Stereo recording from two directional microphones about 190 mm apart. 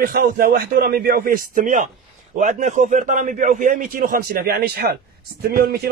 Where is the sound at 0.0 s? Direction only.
50° right (ahead or behind).